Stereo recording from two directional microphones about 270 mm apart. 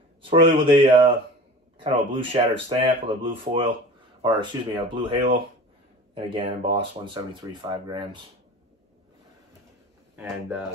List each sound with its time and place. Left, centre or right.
0.2 s speech: centre